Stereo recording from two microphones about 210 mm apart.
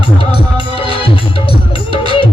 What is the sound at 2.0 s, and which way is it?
Music, 25° left (ahead or behind).